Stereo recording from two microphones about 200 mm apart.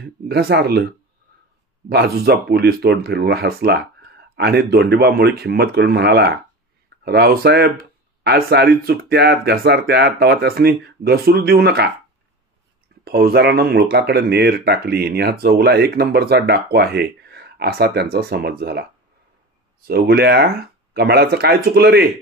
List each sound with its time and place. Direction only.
0.0 s speech: 50° right (ahead or behind)
1.9 s speech: 55° right (ahead or behind)
13.0 s speech: 50° right (ahead or behind)
19.9 s speech: 50° right (ahead or behind)